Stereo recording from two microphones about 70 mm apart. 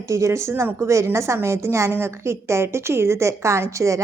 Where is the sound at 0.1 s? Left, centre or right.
Right.